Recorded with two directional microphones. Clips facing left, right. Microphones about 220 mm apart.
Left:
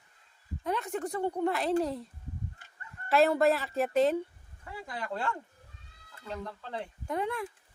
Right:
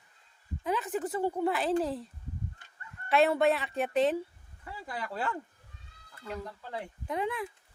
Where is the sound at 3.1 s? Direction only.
Centre (ahead or behind).